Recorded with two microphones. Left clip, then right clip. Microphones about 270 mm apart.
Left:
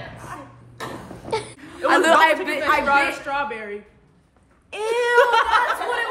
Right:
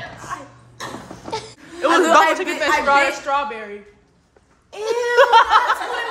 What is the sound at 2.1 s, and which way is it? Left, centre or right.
A woman's voice, right.